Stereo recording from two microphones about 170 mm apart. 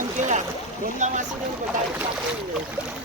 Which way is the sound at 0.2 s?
45° right (ahead or behind).